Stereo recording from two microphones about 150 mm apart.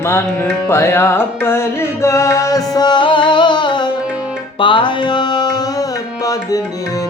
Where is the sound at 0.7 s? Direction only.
15° left (ahead or behind).